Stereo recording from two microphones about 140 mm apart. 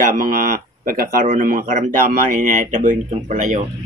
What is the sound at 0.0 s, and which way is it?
Speech, 90° right.